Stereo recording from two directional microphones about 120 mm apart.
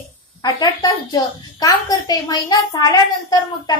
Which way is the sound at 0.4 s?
30° left (ahead or behind).